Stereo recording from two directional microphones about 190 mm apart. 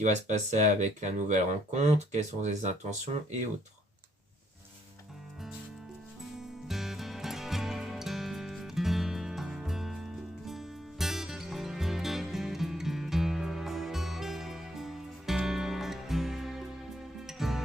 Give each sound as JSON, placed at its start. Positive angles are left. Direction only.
{"t": 0.0, "sound": "speech", "side_deg": -40}
{"t": 6.3, "sound": "music", "side_deg": 0}